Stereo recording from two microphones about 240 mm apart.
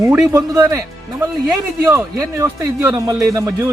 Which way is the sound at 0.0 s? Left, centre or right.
Centre.